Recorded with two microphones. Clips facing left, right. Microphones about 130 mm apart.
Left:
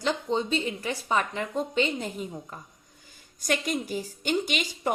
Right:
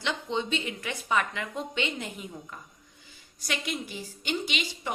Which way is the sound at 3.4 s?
45° left (ahead or behind).